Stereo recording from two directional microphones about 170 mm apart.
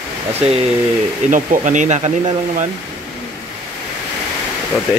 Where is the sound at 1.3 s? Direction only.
50° right (ahead or behind).